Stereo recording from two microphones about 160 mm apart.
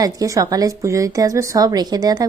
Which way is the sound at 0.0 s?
20° right (ahead or behind).